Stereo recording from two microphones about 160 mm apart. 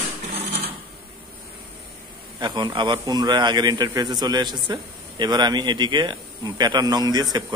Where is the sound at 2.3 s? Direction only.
30° right (ahead or behind).